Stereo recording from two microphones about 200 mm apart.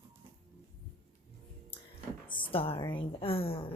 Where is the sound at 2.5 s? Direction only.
30° left (ahead or behind).